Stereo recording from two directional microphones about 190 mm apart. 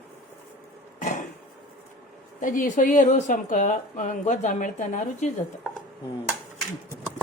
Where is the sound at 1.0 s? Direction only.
45° left (ahead or behind).